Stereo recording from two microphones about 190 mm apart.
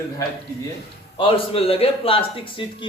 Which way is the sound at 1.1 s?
30° left (ahead or behind).